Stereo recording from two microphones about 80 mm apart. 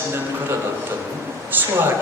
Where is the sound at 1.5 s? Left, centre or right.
Right.